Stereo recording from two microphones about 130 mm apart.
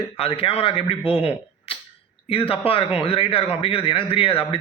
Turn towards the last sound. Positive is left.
turn(degrees=45)  # may be behind; listen again after turning